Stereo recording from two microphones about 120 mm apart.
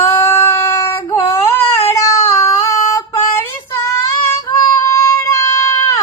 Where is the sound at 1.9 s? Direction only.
25° left (ahead or behind).